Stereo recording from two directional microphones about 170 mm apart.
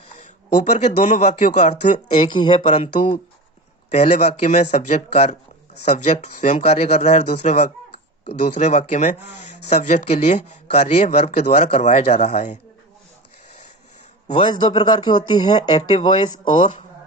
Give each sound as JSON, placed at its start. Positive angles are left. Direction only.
{"t": 0.2, "sound": "speech", "side_deg": 45}
{"t": 2.2, "sound": "speech", "side_deg": 30}
{"t": 14.3, "sound": "speech", "side_deg": 30}